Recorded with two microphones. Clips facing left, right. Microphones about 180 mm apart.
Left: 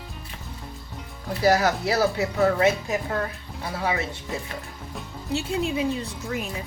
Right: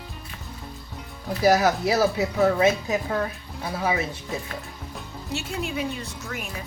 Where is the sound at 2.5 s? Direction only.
20° right (ahead or behind).